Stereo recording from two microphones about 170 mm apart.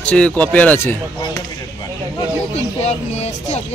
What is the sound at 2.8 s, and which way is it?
Vehicle, 40° left (ahead or behind).